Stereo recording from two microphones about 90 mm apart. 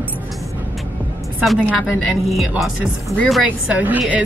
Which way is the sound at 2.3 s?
Centre (ahead or behind).